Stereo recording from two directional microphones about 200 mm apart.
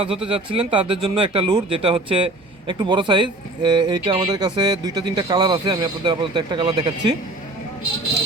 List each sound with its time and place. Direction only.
0.3 s speech: 30° right (ahead or behind)